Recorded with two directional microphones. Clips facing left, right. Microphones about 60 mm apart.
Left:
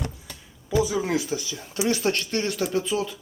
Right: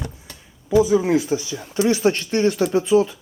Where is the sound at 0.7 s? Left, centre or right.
Centre.